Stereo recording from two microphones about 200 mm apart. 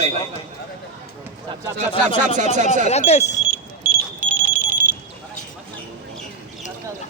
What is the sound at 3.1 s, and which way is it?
Speech, 35° left (ahead or behind).